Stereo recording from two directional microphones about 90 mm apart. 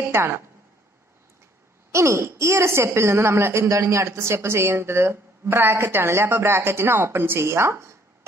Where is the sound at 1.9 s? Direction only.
30° right (ahead or behind).